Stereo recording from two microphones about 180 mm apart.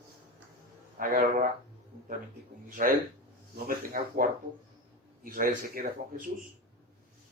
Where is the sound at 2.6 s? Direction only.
50° right (ahead or behind).